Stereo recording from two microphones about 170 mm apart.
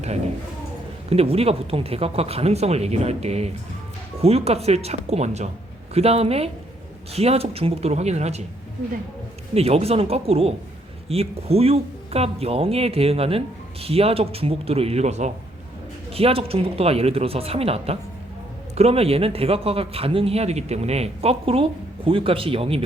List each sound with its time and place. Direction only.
1.1 s a man's voice: 35° right (ahead or behind)
9.6 s a man's voice: 35° right (ahead or behind)